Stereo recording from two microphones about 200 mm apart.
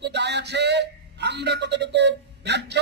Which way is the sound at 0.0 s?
60° right (ahead or behind).